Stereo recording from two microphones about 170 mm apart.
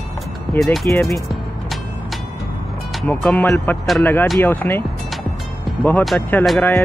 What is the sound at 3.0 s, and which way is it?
Speech, 10° left (ahead or behind).